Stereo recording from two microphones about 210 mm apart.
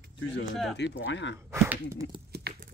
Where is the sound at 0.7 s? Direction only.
60° left (ahead or behind).